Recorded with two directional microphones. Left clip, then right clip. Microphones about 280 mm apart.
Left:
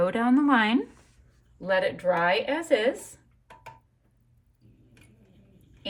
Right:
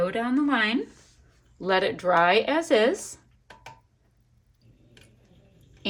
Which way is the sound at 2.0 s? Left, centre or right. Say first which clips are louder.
Right 6 dB; right.